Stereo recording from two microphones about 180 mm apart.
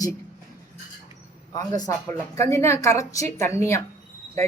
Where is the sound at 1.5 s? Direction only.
20° left (ahead or behind).